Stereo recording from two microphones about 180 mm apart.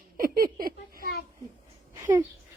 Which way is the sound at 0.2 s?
55° right (ahead or behind).